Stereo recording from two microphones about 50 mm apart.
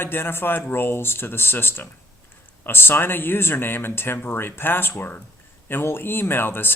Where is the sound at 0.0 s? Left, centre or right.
Left.